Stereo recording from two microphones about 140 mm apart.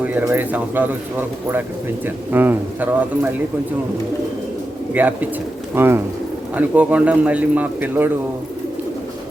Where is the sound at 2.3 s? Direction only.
15° right (ahead or behind).